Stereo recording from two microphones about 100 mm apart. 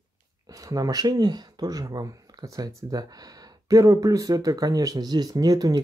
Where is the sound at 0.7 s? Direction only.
40° right (ahead or behind).